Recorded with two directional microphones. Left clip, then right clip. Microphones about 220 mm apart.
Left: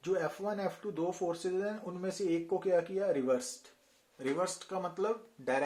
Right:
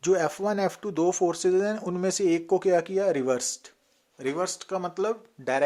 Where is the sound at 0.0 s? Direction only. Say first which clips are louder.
Right 10 dB; 45° right (ahead or behind).